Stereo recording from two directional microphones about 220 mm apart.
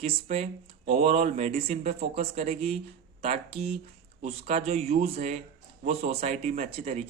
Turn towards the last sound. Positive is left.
turn(degrees=-25)  # may be behind; listen again after turning